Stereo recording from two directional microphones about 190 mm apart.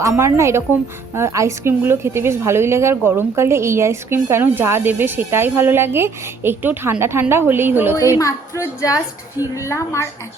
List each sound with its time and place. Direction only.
0.0 s a woman's voice: 15° right (ahead or behind)
8.2 s a woman's voice: 15° left (ahead or behind)